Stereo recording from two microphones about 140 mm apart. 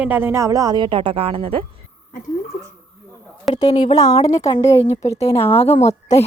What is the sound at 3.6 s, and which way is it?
Speech, 35° left (ahead or behind).